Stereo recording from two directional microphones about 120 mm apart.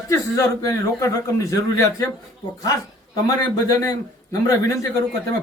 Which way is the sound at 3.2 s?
30° left (ahead or behind).